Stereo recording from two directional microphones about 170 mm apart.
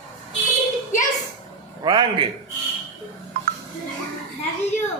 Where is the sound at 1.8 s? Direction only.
25° right (ahead or behind).